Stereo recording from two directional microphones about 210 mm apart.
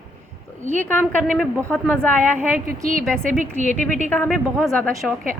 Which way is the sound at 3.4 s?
35° right (ahead or behind).